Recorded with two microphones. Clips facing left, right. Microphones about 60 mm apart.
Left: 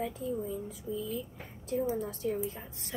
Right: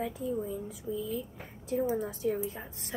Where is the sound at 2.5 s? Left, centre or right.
Right.